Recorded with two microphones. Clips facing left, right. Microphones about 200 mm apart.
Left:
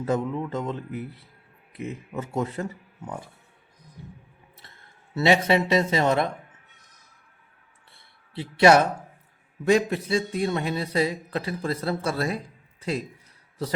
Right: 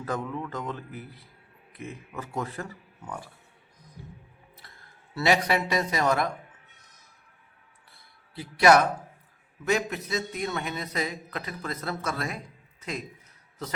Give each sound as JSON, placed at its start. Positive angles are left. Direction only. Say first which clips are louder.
{"t": 0.0, "sound": "speech", "louder": "left 6 dB", "side_deg": 25}
{"t": 5.1, "sound": "speech", "louder": "left 4 dB", "side_deg": 25}
{"t": 7.9, "sound": "a sound", "louder": "left 5 dB", "side_deg": 25}
{"t": 9.6, "sound": "a man's voice", "louder": "left 6 dB", "side_deg": 30}